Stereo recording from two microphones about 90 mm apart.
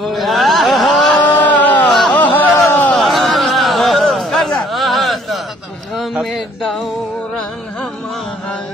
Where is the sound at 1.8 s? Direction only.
Centre (ahead or behind).